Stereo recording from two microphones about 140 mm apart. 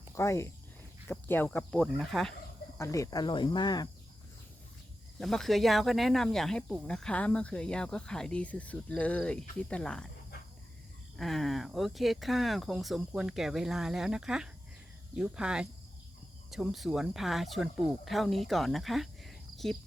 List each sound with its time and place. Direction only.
0.1 s speech: 20° left (ahead or behind); by 2.3 s centre (ahead or behind)
2.7 s speech: 20° left (ahead or behind)
5.2 s speech: centre (ahead or behind)
11.2 s speech: centre (ahead or behind)